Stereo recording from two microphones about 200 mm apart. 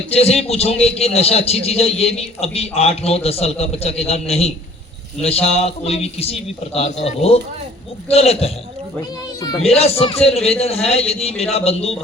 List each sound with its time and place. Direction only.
0.1 s a man's voice: 30° left (ahead or behind)
9.6 s a man's voice: 30° left (ahead or behind)